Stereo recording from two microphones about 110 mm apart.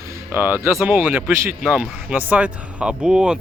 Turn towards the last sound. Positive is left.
turn(degrees=-10)  # may be behind; listen again after turning